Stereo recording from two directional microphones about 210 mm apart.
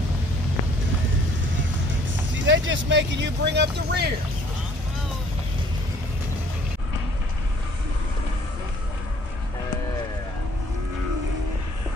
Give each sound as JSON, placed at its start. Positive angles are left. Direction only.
{"t": 2.3, "sound": "speech", "side_deg": -60}